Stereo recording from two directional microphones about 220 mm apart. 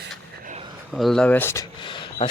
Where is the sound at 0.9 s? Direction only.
Centre (ahead or behind); by 2.3 s 20° left (ahead or behind).